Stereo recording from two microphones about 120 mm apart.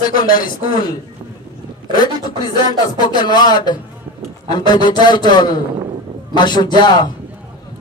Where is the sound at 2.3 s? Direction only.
35° left (ahead or behind).